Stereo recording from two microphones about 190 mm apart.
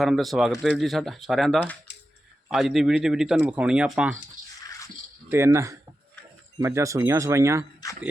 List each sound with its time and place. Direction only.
0.0 s speech: centre (ahead or behind)
4.6 s a sound: 15° left (ahead or behind)
5.3 s speech: 15° right (ahead or behind)